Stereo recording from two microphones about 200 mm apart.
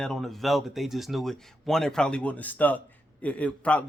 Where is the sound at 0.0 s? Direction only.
Centre (ahead or behind).